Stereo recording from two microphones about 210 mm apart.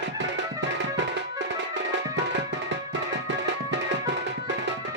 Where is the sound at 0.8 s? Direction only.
60° right (ahead or behind).